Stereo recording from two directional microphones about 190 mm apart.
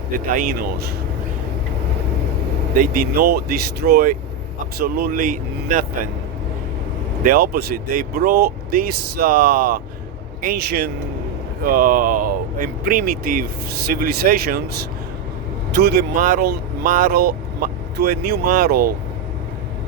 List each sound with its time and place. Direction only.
0.3 s speech: 45° right (ahead or behind)
2.7 s speech: 50° right (ahead or behind)
7.2 s speech: 50° right (ahead or behind)
15.7 s speech: 55° right (ahead or behind)